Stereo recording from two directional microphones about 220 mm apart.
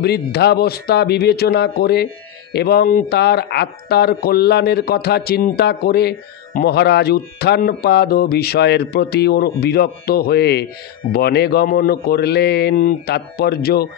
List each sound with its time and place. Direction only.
0.0 s speech: 45° left (ahead or behind)